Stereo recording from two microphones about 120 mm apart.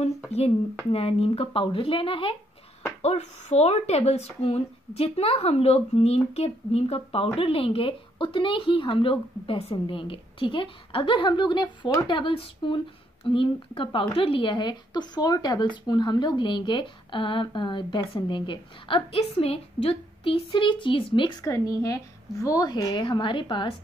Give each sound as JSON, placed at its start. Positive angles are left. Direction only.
{"t": 0.9, "sound": "a woman's voice", "side_deg": 55}
{"t": 3.0, "sound": "a woman's voice", "side_deg": 65}
{"t": 21.5, "sound": "a woman's voice", "side_deg": 30}